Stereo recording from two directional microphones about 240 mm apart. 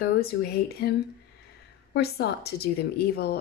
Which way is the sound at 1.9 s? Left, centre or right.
Left.